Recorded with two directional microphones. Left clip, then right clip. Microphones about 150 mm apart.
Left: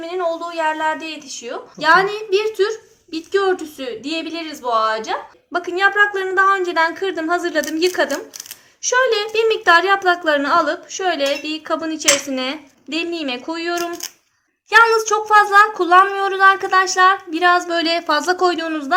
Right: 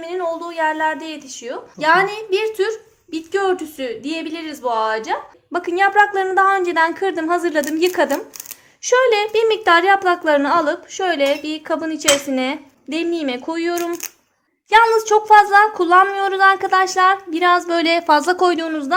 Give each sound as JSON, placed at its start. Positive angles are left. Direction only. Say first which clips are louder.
{"t": 0.0, "sound": "a woman's voice", "louder": "left 1 dB", "side_deg": -50}
{"t": 14.7, "sound": "speech", "louder": "even", "side_deg": -40}